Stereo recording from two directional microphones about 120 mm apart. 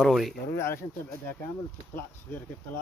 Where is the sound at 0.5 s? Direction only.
20° left (ahead or behind).